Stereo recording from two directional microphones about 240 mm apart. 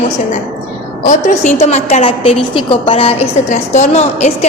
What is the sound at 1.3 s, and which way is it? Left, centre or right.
A woman's voice, left.